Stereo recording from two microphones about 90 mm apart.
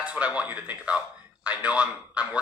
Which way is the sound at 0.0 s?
15° right (ahead or behind).